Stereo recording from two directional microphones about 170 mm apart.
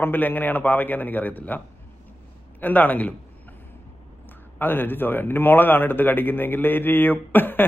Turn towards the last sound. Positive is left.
turn(degrees=10)  # may be behind; listen again after turning